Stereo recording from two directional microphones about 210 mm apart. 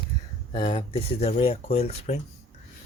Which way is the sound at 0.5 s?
25° left (ahead or behind).